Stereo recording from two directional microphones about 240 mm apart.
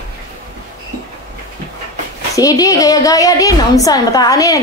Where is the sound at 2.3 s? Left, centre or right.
Centre.